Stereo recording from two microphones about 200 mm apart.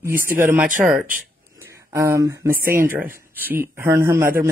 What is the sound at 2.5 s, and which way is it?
Speech, 45° right (ahead or behind).